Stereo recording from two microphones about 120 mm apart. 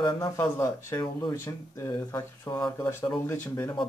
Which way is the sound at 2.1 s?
35° left (ahead or behind).